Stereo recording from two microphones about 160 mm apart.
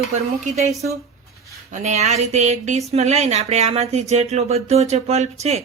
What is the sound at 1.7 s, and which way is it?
Speech, 45° right (ahead or behind).